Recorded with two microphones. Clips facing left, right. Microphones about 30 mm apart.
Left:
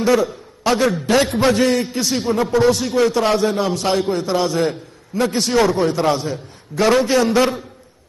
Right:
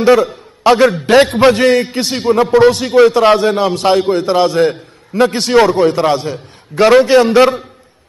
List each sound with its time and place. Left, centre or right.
0.0 s a man's voice: right
5.3 s a man's voice: right